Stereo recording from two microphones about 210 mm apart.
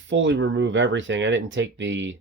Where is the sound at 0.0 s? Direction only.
60° right (ahead or behind).